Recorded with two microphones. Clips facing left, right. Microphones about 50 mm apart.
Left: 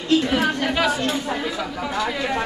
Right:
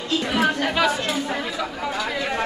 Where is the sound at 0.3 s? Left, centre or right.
Centre.